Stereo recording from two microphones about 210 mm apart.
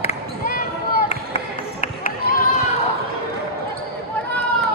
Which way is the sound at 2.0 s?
45° left (ahead or behind).